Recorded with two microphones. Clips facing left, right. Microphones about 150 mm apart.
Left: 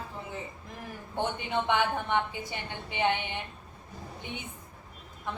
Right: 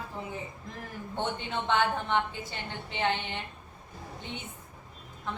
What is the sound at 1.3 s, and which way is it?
A woman's voice, 15° left (ahead or behind).